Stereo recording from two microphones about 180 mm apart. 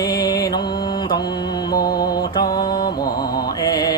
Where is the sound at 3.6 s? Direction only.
20° left (ahead or behind).